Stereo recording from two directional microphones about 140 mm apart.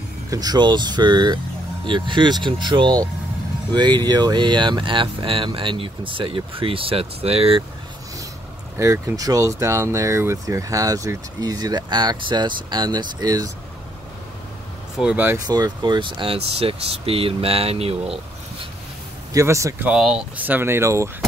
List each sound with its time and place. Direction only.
0.3 s speech: 30° right (ahead or behind); by 7.6 s 45° right (ahead or behind)
8.7 s speech: 20° right (ahead or behind)
15.0 s speech: 10° right (ahead or behind)
15.3 s speech: 30° right (ahead or behind); by 18.2 s 45° right (ahead or behind)
19.3 s speech: 20° right (ahead or behind)
19.9 s speech: 5° right (ahead or behind); by 21.1 s 20° right (ahead or behind)